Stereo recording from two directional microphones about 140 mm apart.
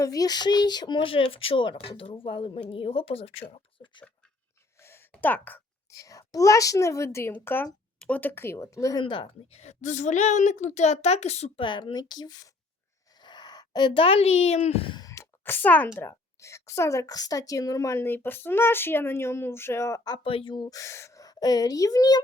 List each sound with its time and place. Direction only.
0.0 s speech: 25° left (ahead or behind); by 3.4 s 45° left (ahead or behind)
4.8 s a sound: 15° left (ahead or behind)
5.2 s a woman's voice: 15° left (ahead or behind); by 11.6 s 50° left (ahead or behind)
11.6 s speech: 35° left (ahead or behind)
15.0 s a sound: 20° left (ahead or behind)
16.0 s a woman's voice: 20° left (ahead or behind)
20.2 s a woman's voice: 40° left (ahead or behind)